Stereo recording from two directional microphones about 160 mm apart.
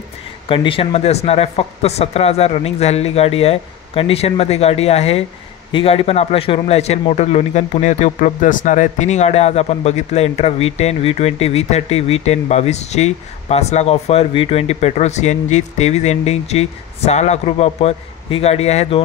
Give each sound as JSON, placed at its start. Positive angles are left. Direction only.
{"t": 0.5, "sound": "a man's voice", "side_deg": 35}